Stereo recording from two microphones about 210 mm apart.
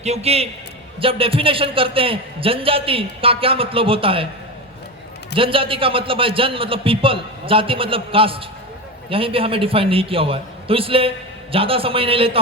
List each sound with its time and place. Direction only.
0.0 s a man's voice: 30° right (ahead or behind)
5.3 s a man's voice: 25° right (ahead or behind)